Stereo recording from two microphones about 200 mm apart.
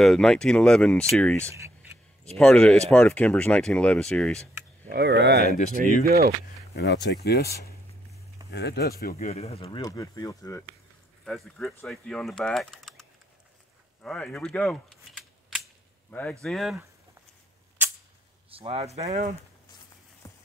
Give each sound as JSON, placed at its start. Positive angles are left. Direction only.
{"t": 0.0, "sound": "speech", "side_deg": 0}
{"t": 1.5, "sound": "a sound", "side_deg": -15}
{"t": 2.3, "sound": "speech", "side_deg": 5}
{"t": 4.9, "sound": "speech", "side_deg": -55}
{"t": 6.7, "sound": "speech", "side_deg": 60}
{"t": 9.1, "sound": "speech", "side_deg": 35}
{"t": 11.2, "sound": "speech", "side_deg": 0}
{"t": 14.0, "sound": "speech", "side_deg": 5}
{"t": 18.5, "sound": "speech", "side_deg": -30}
{"t": 20.2, "sound": "a sound", "side_deg": 15}